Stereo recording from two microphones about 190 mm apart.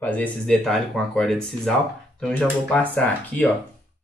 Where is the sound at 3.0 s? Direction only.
10° left (ahead or behind).